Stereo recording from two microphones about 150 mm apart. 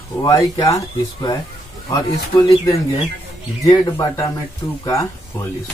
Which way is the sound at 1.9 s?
20° left (ahead or behind).